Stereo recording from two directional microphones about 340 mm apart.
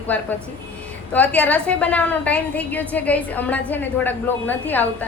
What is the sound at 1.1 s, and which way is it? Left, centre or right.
A woman's voice, centre.